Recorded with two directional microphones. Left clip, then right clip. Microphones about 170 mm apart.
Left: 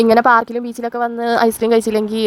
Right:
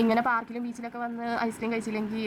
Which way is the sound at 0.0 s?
40° left (ahead or behind).